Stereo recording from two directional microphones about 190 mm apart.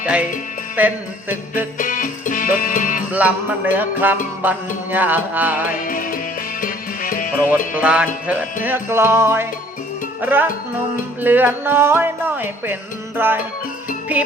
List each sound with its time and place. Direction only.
0.0 s music: 5° right (ahead or behind)
1.8 s music: 45° left (ahead or behind)
3.1 s music: 10° right (ahead or behind)
5.8 s music: 45° left (ahead or behind)
7.8 s music: 5° right (ahead or behind)